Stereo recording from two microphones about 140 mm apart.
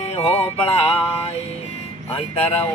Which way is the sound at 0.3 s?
40° left (ahead or behind).